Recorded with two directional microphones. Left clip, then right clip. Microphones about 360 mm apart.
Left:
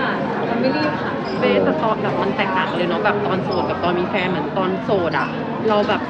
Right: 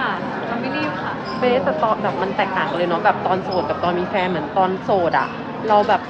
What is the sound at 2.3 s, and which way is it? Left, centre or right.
Speech, right.